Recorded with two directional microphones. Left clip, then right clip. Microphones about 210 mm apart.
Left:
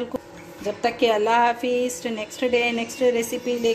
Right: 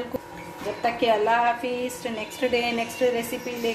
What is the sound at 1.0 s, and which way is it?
A woman's voice, 40° left (ahead or behind).